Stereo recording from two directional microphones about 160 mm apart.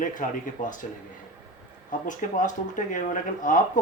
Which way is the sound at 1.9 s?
55° left (ahead or behind).